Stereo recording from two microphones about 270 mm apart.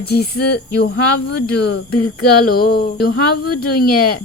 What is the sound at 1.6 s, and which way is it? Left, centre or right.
Speech, left.